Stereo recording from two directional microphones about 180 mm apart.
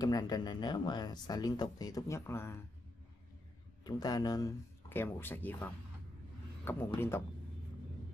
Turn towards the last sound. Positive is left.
turn(degrees=15)  # may be behind; listen again after turning